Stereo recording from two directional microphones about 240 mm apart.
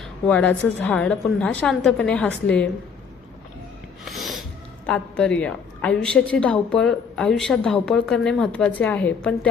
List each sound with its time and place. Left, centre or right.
0.0 s a woman's voice: centre
4.0 s a sound: centre
4.9 s a woman's voice: centre